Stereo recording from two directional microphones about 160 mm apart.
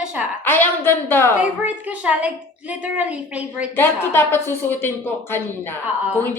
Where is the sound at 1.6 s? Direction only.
10° right (ahead or behind).